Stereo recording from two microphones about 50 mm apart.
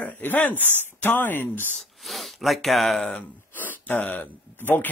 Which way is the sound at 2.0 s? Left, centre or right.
Centre.